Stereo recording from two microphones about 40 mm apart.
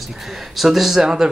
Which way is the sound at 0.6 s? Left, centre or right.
Centre.